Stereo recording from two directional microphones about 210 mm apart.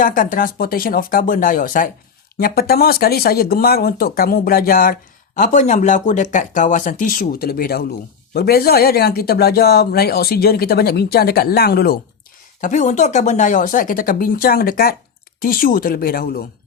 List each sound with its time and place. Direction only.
0.0 s speech: 40° left (ahead or behind)
12.6 s speech: 35° left (ahead or behind)